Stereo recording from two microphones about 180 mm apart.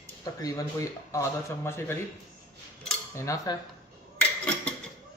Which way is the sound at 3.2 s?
15° left (ahead or behind).